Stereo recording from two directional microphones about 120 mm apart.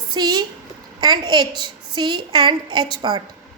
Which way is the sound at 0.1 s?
35° right (ahead or behind).